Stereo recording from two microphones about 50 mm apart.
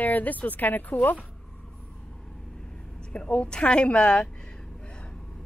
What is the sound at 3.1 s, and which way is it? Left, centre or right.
A woman's voice, left.